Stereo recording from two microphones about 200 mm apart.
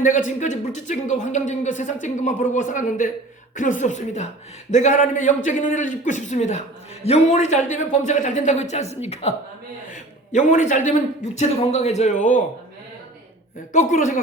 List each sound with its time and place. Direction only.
0.0 s speech: 40° left (ahead or behind)
13.7 s speech: 40° left (ahead or behind)